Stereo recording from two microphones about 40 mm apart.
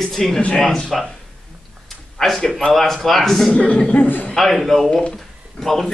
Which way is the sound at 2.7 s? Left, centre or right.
Centre.